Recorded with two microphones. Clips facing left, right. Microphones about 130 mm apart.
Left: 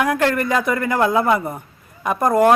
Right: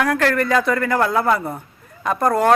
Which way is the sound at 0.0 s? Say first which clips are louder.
Even; 15° left (ahead or behind).